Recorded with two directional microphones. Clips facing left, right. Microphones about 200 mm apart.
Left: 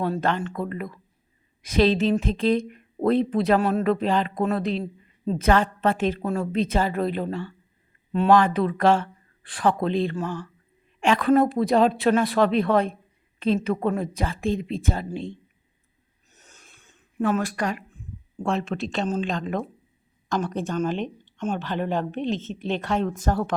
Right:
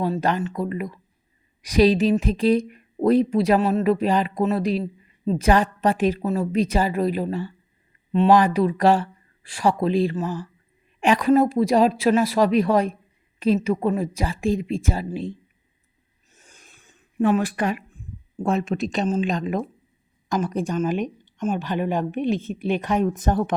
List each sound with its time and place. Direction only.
0.0 s speech: 10° right (ahead or behind)
16.3 s a sound: 10° right (ahead or behind)
18.4 s speech: 20° right (ahead or behind)